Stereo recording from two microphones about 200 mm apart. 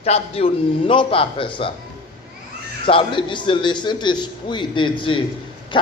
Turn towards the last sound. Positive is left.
turn(degrees=25)  # may be behind; listen again after turning